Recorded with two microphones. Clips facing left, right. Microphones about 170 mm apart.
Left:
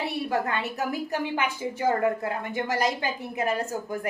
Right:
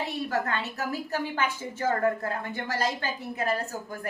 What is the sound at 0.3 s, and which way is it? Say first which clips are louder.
A woman's voice: left 2 dB; 15° left (ahead or behind).